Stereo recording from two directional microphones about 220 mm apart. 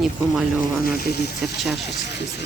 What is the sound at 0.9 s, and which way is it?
Speech, 45° left (ahead or behind).